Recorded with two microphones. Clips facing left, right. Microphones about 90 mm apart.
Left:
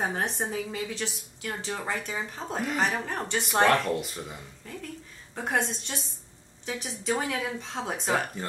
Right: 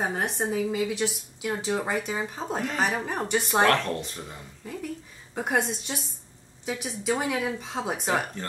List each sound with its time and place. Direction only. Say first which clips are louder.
0.0 s a woman's voice: right 2 dB; 5° right (ahead or behind)
3.6 s speech: even; 10° left (ahead or behind)
4.6 s a woman's voice: right 6 dB; 10° right (ahead or behind)